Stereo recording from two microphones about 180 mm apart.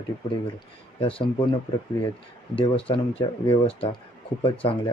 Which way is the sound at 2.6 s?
30° left (ahead or behind).